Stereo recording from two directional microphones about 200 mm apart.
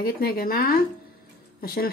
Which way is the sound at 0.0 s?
50° left (ahead or behind).